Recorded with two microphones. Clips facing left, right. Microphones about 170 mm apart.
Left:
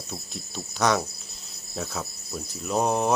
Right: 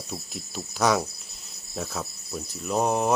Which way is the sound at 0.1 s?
5° right (ahead or behind).